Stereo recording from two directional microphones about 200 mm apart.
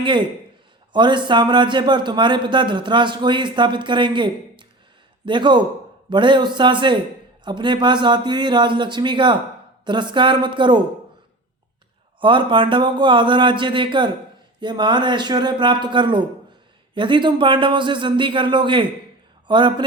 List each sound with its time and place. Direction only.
0.0 s a man's voice: 25° right (ahead or behind)
12.2 s a man's voice: 25° right (ahead or behind)